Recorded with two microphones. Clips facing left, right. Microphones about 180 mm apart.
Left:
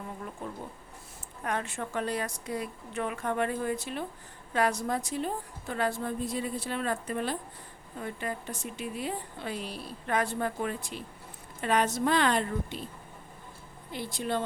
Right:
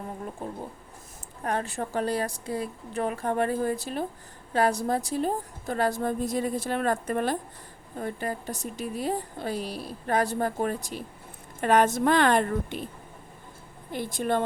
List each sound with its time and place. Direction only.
0.3 s a woman's voice: 30° right (ahead or behind); by 12.9 s 55° right (ahead or behind)
13.9 s a woman's voice: 50° right (ahead or behind)